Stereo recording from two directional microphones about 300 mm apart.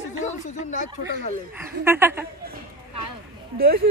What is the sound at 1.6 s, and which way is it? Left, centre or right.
Speech, centre.